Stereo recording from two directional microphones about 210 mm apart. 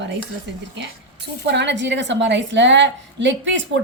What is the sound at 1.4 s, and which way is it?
A woman's voice, 55° right (ahead or behind).